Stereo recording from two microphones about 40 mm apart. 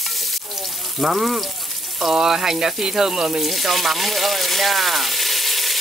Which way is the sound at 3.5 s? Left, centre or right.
Centre.